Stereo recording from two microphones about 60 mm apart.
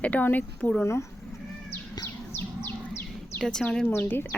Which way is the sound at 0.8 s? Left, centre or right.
Left.